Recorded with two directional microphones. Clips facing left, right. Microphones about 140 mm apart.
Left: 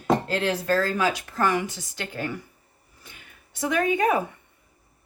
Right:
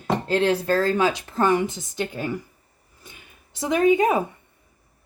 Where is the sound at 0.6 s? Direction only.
30° right (ahead or behind).